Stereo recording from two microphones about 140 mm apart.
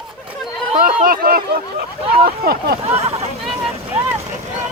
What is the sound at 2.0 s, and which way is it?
Speech, 45° right (ahead or behind).